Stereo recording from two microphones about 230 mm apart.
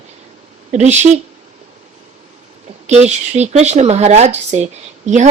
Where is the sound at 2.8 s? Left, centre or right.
Right.